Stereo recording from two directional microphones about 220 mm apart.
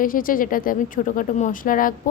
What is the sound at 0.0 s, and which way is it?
A woman's voice, 40° left (ahead or behind).